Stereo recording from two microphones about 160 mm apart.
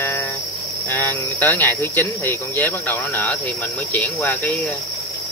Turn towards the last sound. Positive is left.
turn(degrees=15)  # may be behind; listen again after turning